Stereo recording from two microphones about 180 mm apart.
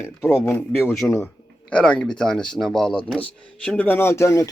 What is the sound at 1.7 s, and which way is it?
Speech, 5° left (ahead or behind).